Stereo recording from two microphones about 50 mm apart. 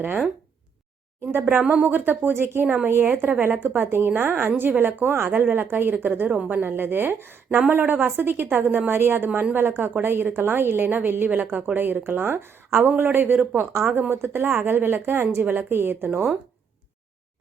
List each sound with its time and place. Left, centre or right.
1.3 s a woman's voice: right
1.6 s a woman's voice: right
1.9 s a woman's voice: right
5.3 s a woman's voice: right
14.1 s a woman's voice: right